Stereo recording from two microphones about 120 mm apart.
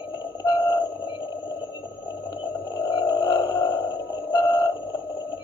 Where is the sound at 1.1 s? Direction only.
40° left (ahead or behind).